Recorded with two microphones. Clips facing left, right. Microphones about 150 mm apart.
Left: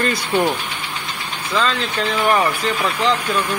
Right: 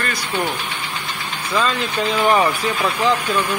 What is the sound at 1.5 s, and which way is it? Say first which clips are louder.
Speech: even; 10° right (ahead or behind).